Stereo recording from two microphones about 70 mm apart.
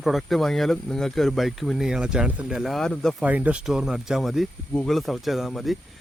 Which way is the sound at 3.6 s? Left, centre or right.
Centre.